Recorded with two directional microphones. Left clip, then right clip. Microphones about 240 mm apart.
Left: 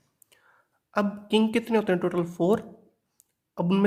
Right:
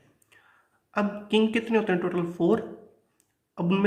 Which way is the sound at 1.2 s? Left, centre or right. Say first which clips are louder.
Right 2 dB; left.